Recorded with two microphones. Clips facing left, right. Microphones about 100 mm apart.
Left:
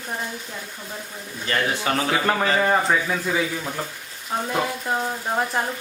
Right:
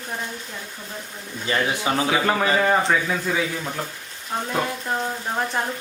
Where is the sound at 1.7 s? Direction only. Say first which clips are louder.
Right 1 dB; 15° right (ahead or behind).